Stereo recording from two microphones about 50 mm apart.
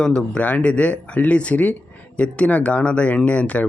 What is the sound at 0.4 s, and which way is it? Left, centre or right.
A man's voice, left.